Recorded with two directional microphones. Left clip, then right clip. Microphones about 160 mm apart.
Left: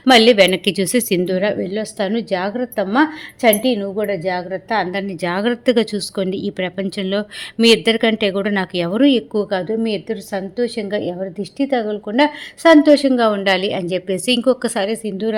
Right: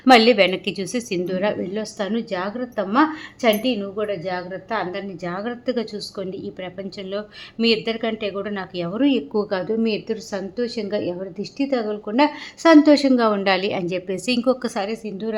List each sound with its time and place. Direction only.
0.1 s a woman's voice: 15° left (ahead or behind)
1.3 s a woman's voice: 15° left (ahead or behind)
9.3 s a woman's voice: 10° left (ahead or behind); by 15.4 s 25° left (ahead or behind)